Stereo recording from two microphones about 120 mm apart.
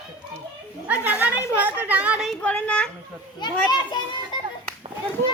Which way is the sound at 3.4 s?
40° left (ahead or behind).